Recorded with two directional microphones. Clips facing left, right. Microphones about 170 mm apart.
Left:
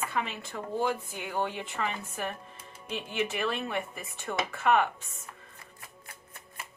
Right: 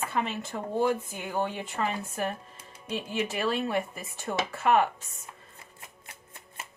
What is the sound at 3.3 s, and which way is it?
A woman's voice, 35° right (ahead or behind).